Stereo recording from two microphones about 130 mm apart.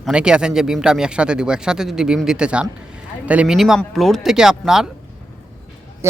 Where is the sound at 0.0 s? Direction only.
5° right (ahead or behind).